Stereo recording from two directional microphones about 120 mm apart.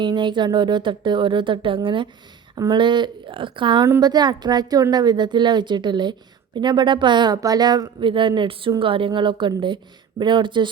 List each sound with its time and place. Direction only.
0.0 s a woman's voice: 40° right (ahead or behind)